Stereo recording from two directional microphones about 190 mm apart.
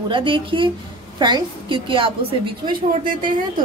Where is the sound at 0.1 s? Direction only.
25° right (ahead or behind).